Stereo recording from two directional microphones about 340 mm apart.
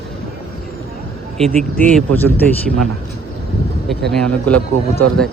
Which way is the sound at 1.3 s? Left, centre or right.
Centre.